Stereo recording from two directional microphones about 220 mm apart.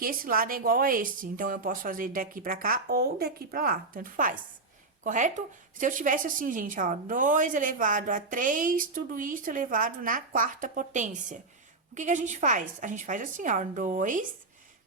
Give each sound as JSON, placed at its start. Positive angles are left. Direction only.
{"t": 0.0, "sound": "a woman's voice", "side_deg": -40}